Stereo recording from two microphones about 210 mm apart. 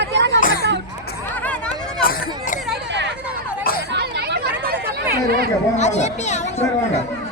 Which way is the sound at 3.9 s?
50° right (ahead or behind).